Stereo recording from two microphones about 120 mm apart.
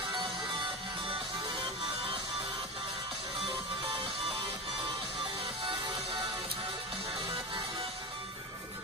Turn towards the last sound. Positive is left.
turn(degrees=-50)  # may be behind; listen again after turning